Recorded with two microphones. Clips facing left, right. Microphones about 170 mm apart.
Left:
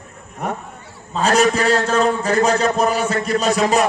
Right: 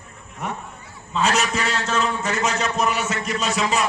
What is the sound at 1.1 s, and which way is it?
A man's voice, 40° left (ahead or behind).